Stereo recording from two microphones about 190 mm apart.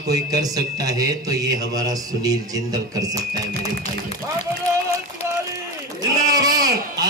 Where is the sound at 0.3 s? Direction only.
20° right (ahead or behind).